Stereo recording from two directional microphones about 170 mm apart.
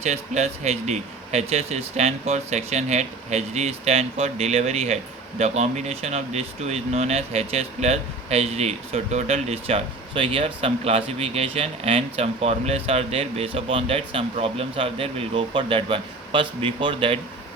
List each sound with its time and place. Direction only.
0.0 s speech: 40° right (ahead or behind)